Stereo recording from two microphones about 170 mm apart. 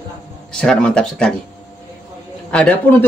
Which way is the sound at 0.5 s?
5° left (ahead or behind).